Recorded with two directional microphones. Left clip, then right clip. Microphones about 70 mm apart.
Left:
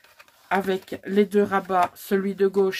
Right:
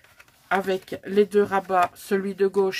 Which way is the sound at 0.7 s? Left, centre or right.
Right.